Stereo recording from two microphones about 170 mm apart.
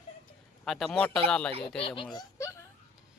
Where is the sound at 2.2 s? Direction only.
20° left (ahead or behind).